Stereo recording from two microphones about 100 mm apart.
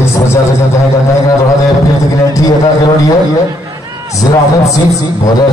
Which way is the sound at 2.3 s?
35° left (ahead or behind).